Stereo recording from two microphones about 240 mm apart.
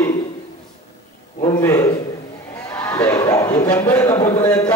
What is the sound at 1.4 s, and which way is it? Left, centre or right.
A man's voice, centre.